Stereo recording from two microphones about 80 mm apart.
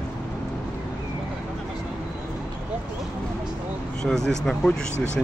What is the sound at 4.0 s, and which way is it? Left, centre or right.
Speech, centre.